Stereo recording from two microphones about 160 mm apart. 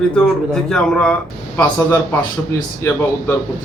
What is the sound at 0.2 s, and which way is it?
Speech, 5° left (ahead or behind).